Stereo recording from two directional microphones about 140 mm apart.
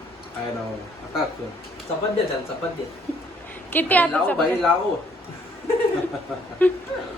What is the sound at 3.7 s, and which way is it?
Speech, 10° left (ahead or behind).